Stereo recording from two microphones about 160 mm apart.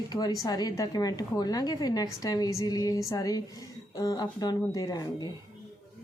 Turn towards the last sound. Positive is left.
turn(degrees=25)  # may be behind; listen again after turning